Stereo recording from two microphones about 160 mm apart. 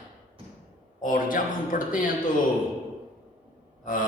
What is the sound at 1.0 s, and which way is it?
A man's voice, 55° left (ahead or behind).